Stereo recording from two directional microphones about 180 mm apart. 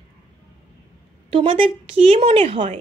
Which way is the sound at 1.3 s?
30° right (ahead or behind).